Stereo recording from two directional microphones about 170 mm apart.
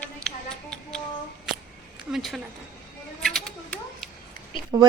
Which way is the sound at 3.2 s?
5° left (ahead or behind).